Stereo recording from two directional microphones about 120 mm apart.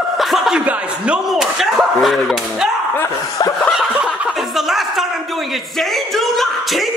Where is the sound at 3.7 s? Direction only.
5° right (ahead or behind).